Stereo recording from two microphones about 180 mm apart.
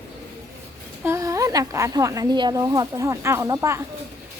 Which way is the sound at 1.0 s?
15° right (ahead or behind).